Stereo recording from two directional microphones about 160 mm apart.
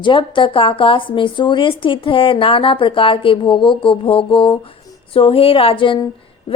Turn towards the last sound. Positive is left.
turn(degrees=35)  # may be behind; listen again after turning